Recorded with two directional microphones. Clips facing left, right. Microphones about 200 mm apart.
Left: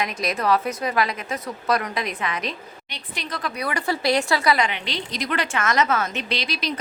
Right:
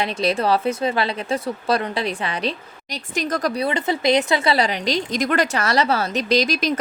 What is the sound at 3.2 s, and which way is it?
Speech, 45° right (ahead or behind).